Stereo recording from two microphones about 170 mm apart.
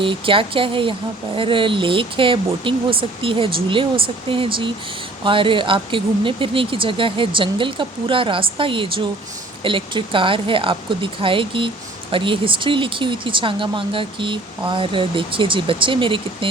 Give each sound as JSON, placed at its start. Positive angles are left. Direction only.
{"t": 0.0, "sound": "speech", "side_deg": -30}